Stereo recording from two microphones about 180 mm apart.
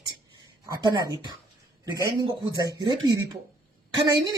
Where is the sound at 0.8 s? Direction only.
25° right (ahead or behind).